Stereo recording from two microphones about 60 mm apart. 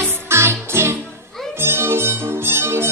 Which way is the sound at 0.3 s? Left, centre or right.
Right.